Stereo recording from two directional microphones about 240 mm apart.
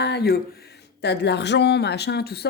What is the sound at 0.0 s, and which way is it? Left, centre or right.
Speech, left.